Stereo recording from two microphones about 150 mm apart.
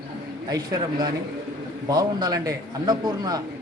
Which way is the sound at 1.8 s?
25° right (ahead or behind).